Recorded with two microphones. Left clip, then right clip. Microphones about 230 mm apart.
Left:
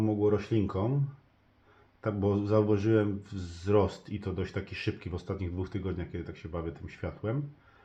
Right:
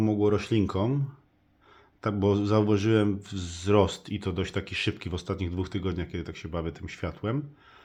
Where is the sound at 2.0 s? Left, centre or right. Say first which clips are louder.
Right 4 dB; right.